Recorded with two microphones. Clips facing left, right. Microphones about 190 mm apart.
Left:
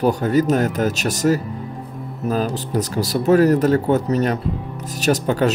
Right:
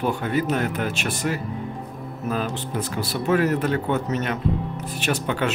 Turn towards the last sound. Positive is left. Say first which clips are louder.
# left 6 dB
turn(degrees=40)  # may be behind; listen again after turning